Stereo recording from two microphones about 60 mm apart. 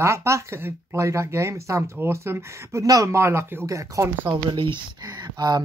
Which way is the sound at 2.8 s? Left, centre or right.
Right.